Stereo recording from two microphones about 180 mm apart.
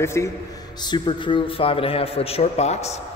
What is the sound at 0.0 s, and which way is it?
Speech, 15° left (ahead or behind).